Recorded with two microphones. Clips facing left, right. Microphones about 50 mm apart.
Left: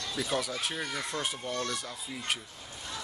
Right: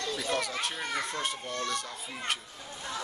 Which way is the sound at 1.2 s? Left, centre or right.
Centre.